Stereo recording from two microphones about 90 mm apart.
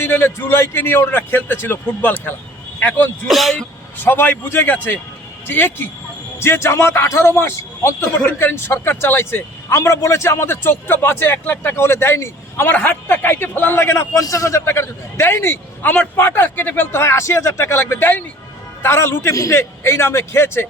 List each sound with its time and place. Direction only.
0.0 s a man's voice: 25° left (ahead or behind)
3.2 s speech: centre (ahead or behind)
4.0 s a man's voice: 20° left (ahead or behind)
12.7 s a man's voice: 15° left (ahead or behind)